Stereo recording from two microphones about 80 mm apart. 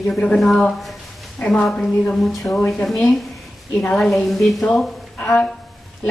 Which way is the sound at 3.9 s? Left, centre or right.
Centre.